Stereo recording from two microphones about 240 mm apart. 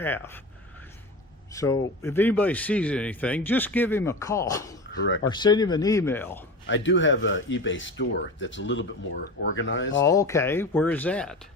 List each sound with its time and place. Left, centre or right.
1.5 s speech: centre
6.7 s speech: left
10.0 s speech: centre